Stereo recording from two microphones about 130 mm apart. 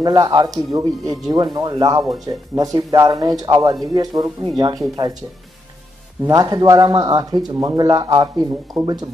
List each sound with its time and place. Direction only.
0.0 s speech: 30° right (ahead or behind)
6.2 s speech: 30° right (ahead or behind)
8.8 s speech: centre (ahead or behind)